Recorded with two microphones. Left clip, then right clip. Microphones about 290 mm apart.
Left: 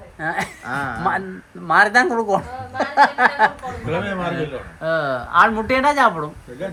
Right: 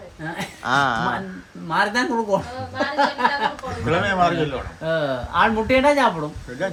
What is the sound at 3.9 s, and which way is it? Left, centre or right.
Speech, right.